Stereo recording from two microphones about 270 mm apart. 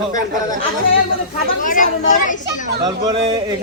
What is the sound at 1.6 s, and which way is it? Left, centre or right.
Speech, left.